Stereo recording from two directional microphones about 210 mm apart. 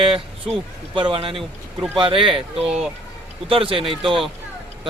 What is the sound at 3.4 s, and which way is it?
Speech, 25° right (ahead or behind).